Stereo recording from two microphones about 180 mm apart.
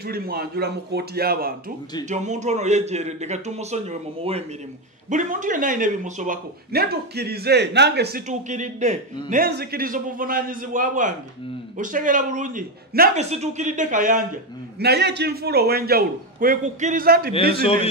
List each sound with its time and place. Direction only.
0.0 s speech: 60° right (ahead or behind)
2.0 s a man's voice: 40° right (ahead or behind)
5.1 s speech: 45° right (ahead or behind); by 8.2 s 65° right (ahead or behind)
8.3 s a woman's voice: 45° right (ahead or behind)
9.3 s a woman's voice: 60° right (ahead or behind)
13.1 s a woman's voice: 40° right (ahead or behind); by 17.3 s 55° right (ahead or behind)